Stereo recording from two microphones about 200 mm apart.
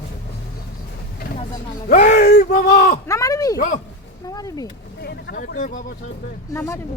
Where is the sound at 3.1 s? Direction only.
15° left (ahead or behind).